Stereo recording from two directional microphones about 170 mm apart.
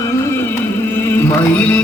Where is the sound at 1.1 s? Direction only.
10° left (ahead or behind).